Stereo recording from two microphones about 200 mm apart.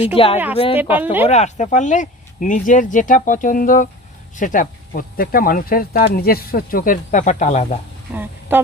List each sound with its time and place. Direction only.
0.2 s speech: 25° left (ahead or behind)
0.8 s speech: 10° right (ahead or behind)
1.3 s speech: 35° left (ahead or behind)
8.1 s speech: 10° right (ahead or behind)